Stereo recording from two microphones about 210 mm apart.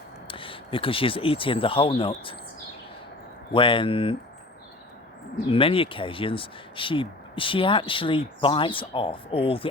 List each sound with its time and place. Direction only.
0.3 s speech: 25° left (ahead or behind)
3.5 s speech: 25° left (ahead or behind)
5.5 s speech: 25° left (ahead or behind)